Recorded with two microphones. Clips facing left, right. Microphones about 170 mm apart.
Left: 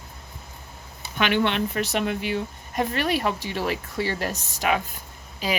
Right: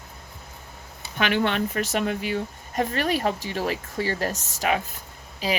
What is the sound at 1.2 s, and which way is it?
A woman's voice, 40° right (ahead or behind).